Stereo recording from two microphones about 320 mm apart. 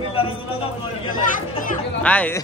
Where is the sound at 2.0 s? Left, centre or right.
Centre.